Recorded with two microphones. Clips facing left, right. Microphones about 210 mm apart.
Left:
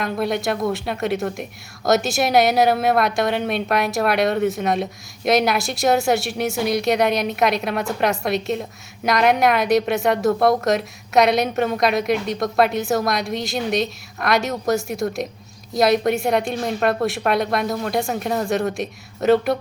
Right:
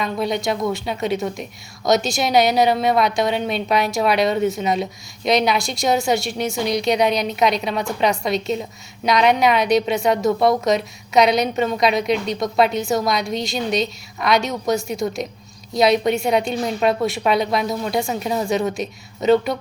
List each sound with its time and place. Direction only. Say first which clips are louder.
0.0 s a woman's voice: even; centre (ahead or behind)